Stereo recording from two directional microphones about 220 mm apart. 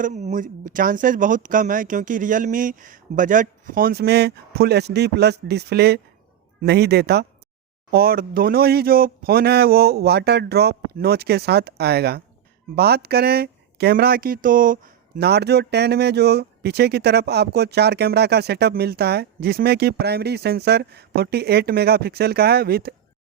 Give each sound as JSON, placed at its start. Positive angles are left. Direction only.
{"t": 0.0, "sound": "speech", "side_deg": -35}